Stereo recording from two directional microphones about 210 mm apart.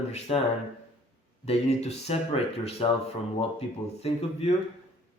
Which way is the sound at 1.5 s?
30° left (ahead or behind).